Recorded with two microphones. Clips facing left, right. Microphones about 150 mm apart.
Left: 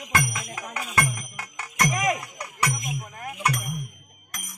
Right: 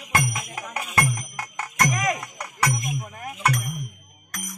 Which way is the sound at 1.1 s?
45° right (ahead or behind).